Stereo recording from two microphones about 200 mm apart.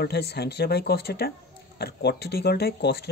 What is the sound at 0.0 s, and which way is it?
Speech, 55° left (ahead or behind).